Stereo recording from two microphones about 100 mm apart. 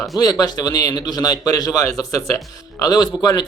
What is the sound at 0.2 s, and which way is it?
A man's voice, 40° left (ahead or behind).